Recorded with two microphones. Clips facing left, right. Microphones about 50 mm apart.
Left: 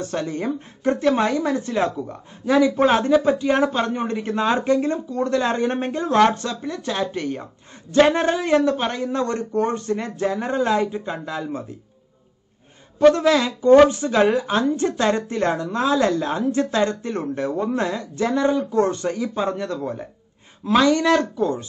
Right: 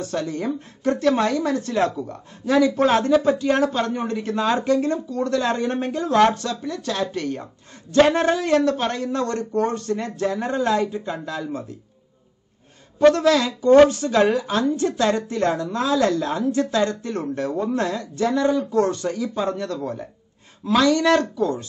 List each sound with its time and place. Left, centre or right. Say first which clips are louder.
0.0 s a woman's voice: even; left
13.1 s a woman's voice: even; left